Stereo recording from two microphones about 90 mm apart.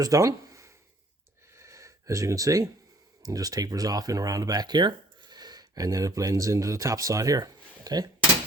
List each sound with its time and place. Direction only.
0.0 s speech: 40° right (ahead or behind)
1.5 s a sound: 35° right (ahead or behind)
3.2 s speech: 45° right (ahead or behind)